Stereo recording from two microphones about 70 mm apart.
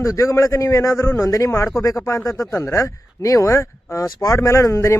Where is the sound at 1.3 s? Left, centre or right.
Left.